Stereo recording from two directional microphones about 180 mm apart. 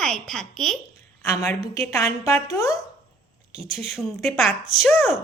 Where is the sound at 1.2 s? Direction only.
15° left (ahead or behind).